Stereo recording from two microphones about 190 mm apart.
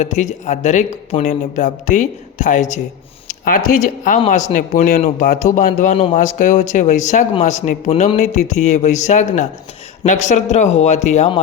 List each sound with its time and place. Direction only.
0.0 s a man's voice: 40° left (ahead or behind)